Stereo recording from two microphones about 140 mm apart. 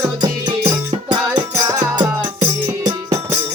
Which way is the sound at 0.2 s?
30° right (ahead or behind).